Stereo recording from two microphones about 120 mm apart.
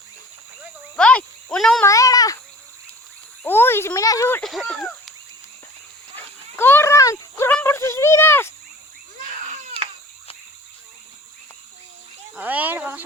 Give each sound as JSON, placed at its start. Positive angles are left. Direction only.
{"t": 0.9, "sound": "cricket", "side_deg": 5}
{"t": 1.8, "sound": "cat", "side_deg": 25}
{"t": 3.4, "sound": "a sound", "side_deg": 20}
{"t": 4.4, "sound": "speech", "side_deg": 0}
{"t": 6.1, "sound": "dog", "side_deg": 20}
{"t": 7.5, "sound": "a sound", "side_deg": 20}
{"t": 9.2, "sound": "baby cry", "side_deg": -90}
{"t": 12.4, "sound": "speech", "side_deg": -15}